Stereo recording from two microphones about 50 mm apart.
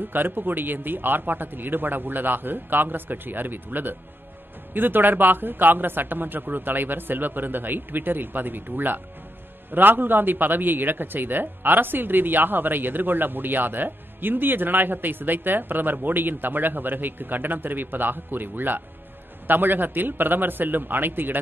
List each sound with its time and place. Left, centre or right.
0.0 s a man's voice: right